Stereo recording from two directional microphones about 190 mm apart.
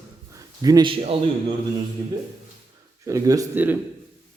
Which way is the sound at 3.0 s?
15° right (ahead or behind).